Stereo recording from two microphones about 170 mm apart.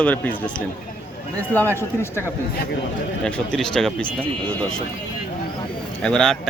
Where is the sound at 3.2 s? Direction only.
5° left (ahead or behind).